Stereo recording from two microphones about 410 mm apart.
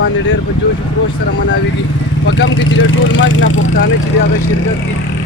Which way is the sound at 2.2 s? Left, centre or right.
Left.